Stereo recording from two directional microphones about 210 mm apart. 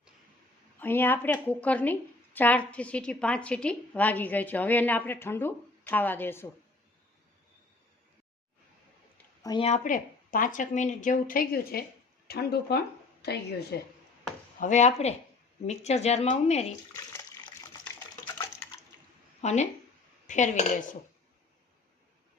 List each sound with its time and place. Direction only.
0.8 s a woman's voice: 10° left (ahead or behind)
9.1 s a sound: 20° left (ahead or behind)
9.6 s a woman's voice: 35° left (ahead or behind); by 13.7 s 50° left (ahead or behind)
14.6 s a woman's voice: 35° left (ahead or behind)
16.9 s water: 15° left (ahead or behind)
19.4 s a woman's voice: 30° left (ahead or behind)